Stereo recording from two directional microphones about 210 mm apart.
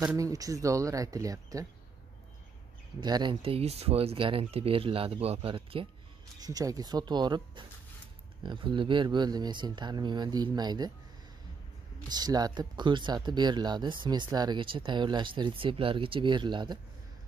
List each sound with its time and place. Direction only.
0.0 s speech: 15° right (ahead or behind)
3.0 s speech: 20° right (ahead or behind)
12.1 s speech: 20° right (ahead or behind)